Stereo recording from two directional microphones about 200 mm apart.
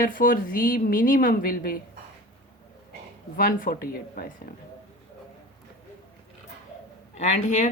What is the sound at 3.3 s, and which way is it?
Speech, 45° left (ahead or behind).